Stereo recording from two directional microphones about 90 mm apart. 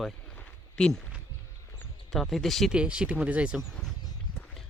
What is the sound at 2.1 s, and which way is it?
Speech, centre (ahead or behind).